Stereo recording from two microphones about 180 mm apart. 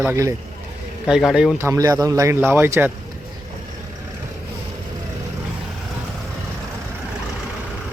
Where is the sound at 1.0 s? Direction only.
5° right (ahead or behind).